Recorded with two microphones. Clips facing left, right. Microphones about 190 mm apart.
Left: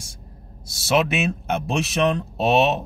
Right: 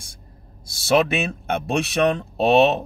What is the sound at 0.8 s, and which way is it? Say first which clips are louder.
Speech: right 2 dB; centre (ahead or behind).